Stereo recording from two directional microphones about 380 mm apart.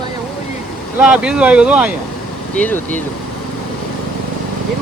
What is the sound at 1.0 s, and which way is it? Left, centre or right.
Speech, centre.